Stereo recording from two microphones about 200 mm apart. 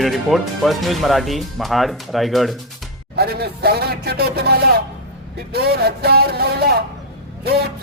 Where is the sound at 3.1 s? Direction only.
50° right (ahead or behind).